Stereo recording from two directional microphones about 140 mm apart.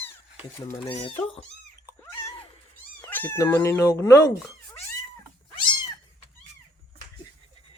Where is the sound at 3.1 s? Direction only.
15° left (ahead or behind).